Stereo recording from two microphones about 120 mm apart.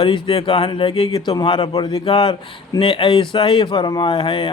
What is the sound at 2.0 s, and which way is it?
A man's voice, 45° left (ahead or behind).